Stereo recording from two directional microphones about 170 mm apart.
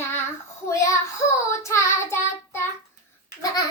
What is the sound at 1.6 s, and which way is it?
Child singing, 15° left (ahead or behind).